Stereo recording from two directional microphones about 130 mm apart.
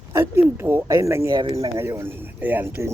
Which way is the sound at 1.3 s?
40° right (ahead or behind).